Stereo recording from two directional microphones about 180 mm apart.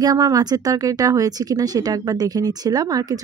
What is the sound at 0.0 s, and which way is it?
Speech, 20° right (ahead or behind).